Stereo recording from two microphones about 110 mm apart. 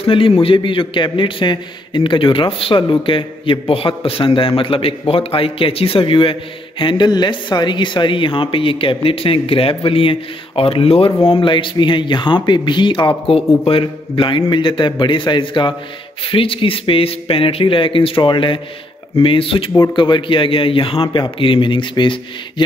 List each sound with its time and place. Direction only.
0.0 s a man's voice: 55° left (ahead or behind)
13.3 s a man's voice: 55° left (ahead or behind)